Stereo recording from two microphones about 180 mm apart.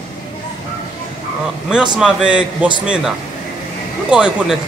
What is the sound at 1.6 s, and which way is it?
A man's voice, 5° right (ahead or behind).